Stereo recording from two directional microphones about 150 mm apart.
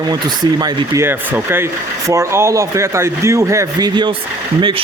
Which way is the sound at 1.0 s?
15° right (ahead or behind).